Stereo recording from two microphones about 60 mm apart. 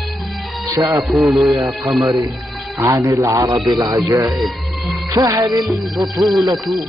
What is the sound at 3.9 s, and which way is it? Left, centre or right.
Music, right.